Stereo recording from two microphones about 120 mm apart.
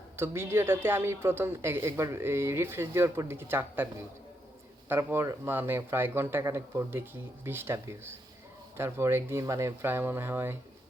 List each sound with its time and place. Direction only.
0.2 s a woman's voice: 20° right (ahead or behind)
4.9 s a woman's voice: 20° right (ahead or behind)